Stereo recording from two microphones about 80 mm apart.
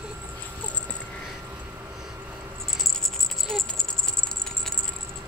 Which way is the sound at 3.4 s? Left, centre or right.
Centre.